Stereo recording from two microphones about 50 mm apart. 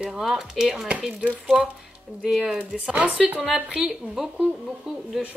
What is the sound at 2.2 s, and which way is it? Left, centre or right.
Speech, centre.